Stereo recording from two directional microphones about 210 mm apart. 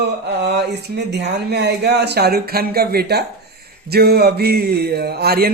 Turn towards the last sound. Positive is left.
turn(degrees=-45)  # may be behind; listen again after turning